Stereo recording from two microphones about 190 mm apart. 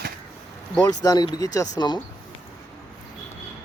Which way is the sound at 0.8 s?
20° left (ahead or behind).